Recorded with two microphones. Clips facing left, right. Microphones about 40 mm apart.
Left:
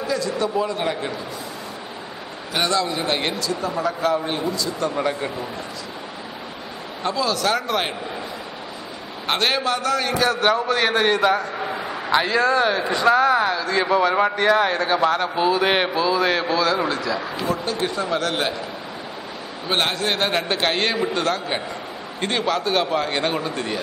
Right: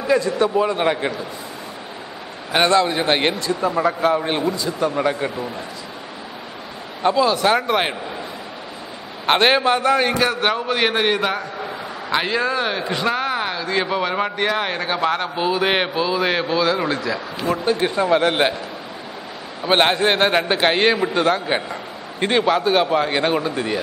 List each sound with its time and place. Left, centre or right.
0.0 s a man's voice: right
2.5 s a man's voice: right; by 5.3 s centre
7.0 s a man's voice: centre
9.2 s a man's voice: right; by 17.2 s centre
17.6 s a man's voice: right
19.7 s speech: right; by 23.8 s centre